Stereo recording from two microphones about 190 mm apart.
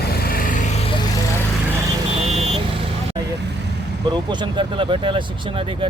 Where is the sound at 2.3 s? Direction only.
30° right (ahead or behind).